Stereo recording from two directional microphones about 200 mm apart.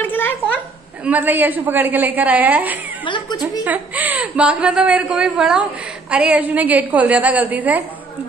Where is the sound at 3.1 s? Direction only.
20° left (ahead or behind).